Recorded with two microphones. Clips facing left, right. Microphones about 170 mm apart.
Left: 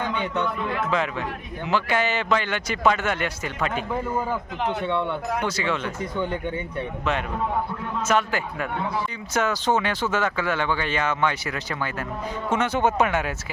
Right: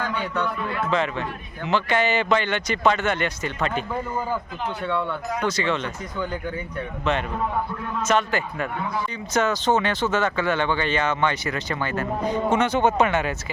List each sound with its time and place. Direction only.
0.0 s speech: 20° left (ahead or behind)
0.9 s speech: 5° left (ahead or behind)
4.7 s speech: 25° left (ahead or behind)
5.5 s speech: 5° left (ahead or behind)
6.1 s speech: 25° left (ahead or behind)
7.0 s speech: 5° left (ahead or behind)